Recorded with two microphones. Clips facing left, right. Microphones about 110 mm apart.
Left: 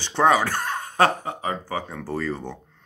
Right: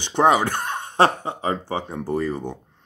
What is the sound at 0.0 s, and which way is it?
Speech, 15° right (ahead or behind).